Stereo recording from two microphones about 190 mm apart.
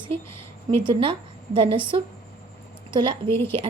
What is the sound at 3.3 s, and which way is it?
Speech, 10° left (ahead or behind).